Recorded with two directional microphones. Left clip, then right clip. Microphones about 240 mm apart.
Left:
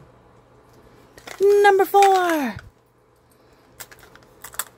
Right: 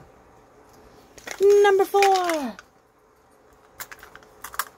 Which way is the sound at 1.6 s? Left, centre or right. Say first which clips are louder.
Left 3 dB; centre.